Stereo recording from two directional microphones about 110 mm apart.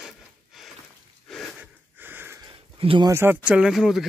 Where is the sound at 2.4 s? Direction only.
55° right (ahead or behind).